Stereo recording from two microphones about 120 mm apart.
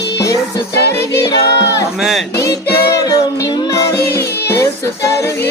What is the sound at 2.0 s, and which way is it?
Chant, centre (ahead or behind).